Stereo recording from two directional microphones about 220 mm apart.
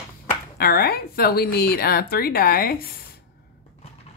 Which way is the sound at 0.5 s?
45° left (ahead or behind).